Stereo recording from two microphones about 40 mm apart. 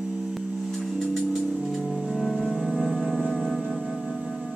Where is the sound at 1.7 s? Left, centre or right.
Centre.